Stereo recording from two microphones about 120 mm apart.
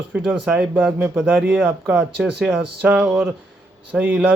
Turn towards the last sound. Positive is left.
turn(degrees=-15)  # may be behind; listen again after turning